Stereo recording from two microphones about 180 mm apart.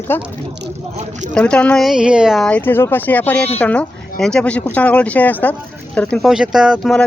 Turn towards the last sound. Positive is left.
turn(degrees=0)  # may be behind; listen again after turning